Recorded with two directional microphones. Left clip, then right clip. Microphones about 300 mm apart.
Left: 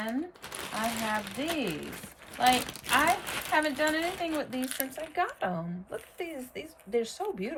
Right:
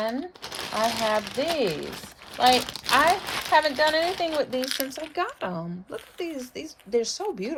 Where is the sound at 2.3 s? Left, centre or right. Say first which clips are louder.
Right 5 dB; centre.